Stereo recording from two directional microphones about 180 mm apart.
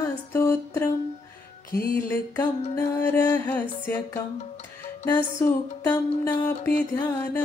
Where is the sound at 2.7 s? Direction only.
20° left (ahead or behind).